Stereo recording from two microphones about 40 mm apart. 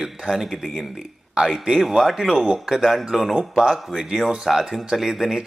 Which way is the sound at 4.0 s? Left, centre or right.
Centre.